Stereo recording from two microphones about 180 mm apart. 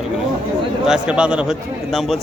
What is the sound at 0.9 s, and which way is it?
Speech, 5° right (ahead or behind).